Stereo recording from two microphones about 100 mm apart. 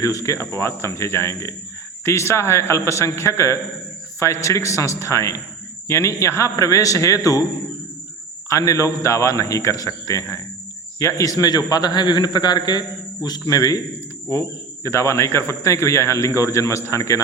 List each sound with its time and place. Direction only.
0.0 s a man's voice: 30° left (ahead or behind)
8.4 s a man's voice: 35° left (ahead or behind)
14.8 s a man's voice: 25° left (ahead or behind)